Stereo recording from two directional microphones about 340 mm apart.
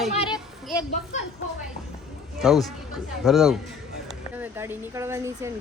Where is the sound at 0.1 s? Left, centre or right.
Centre.